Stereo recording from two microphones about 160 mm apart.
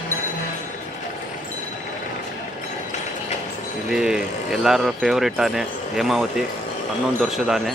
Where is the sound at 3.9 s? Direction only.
5° right (ahead or behind).